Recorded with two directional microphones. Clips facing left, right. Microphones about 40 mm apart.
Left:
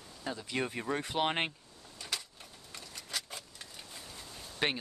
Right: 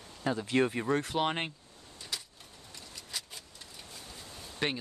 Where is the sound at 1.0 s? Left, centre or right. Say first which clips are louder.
Right 1 dB; centre.